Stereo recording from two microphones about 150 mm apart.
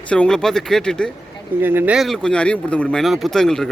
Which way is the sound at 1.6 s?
15° right (ahead or behind).